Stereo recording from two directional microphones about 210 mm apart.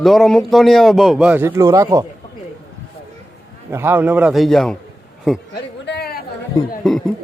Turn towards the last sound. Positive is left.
turn(degrees=5)  # may be behind; listen again after turning